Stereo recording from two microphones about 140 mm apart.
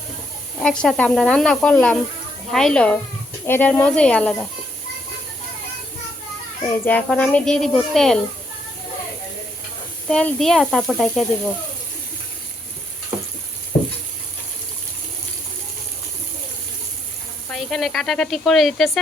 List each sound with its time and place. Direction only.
0.6 s a child's voice: 5° left (ahead or behind)
6.7 s a child's voice: 15° left (ahead or behind)
10.1 s a child's voice: 5° left (ahead or behind)
17.5 s a child's voice: 5° left (ahead or behind)